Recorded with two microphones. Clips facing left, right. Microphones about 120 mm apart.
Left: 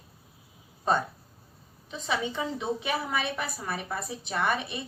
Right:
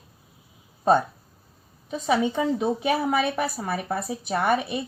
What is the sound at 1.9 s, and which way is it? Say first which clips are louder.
A woman's voice: right 8 dB; 45° right (ahead or behind).